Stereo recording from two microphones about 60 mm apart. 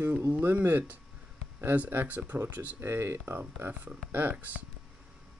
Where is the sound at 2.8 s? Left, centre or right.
Right.